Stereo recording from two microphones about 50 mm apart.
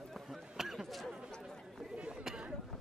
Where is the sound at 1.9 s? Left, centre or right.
Centre.